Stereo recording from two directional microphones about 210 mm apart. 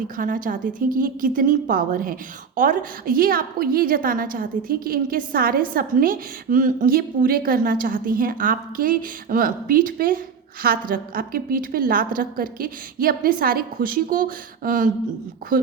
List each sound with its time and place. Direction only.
0.2 s a woman's voice: 40° right (ahead or behind)